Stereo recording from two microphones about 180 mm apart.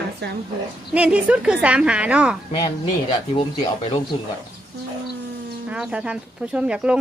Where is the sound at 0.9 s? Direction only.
5° right (ahead or behind).